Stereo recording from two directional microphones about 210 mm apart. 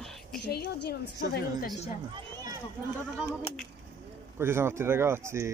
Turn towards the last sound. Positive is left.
turn(degrees=-15)  # may be behind; listen again after turning